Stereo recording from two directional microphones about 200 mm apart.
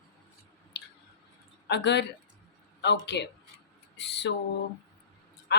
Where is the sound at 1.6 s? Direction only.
60° left (ahead or behind).